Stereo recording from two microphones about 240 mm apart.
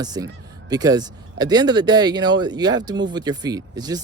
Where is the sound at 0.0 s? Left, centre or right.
Centre.